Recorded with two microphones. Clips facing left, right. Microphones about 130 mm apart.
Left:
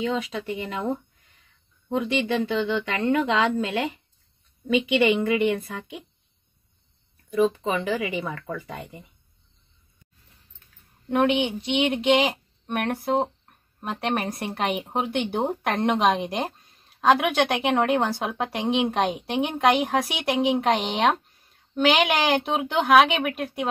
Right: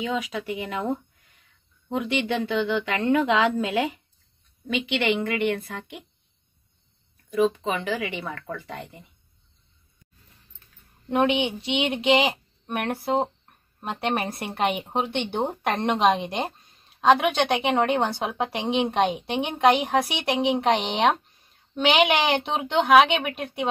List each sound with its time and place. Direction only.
0.0 s speech: 5° right (ahead or behind)
5.5 s speech: 5° left (ahead or behind)
7.3 s speech: centre (ahead or behind)
11.1 s speech: centre (ahead or behind)